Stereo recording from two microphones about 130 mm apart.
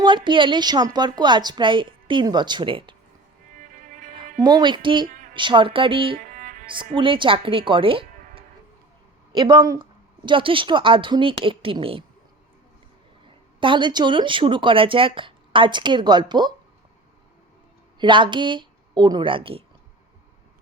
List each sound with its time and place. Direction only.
0.0 s speech: 35° right (ahead or behind)
4.4 s speech: 30° right (ahead or behind)
6.1 s music: 90° right
6.7 s speech: 40° right (ahead or behind)
13.6 s speech: 40° right (ahead or behind)
18.0 s speech: 35° right (ahead or behind)